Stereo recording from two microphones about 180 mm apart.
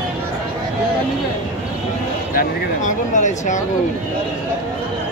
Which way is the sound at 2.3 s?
45° left (ahead or behind).